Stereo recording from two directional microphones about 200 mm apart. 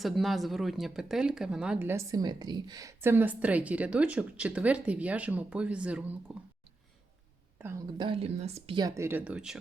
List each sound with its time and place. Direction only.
0.0 s speech: centre (ahead or behind)
7.9 s speech: 25° right (ahead or behind); by 9.6 s 5° right (ahead or behind)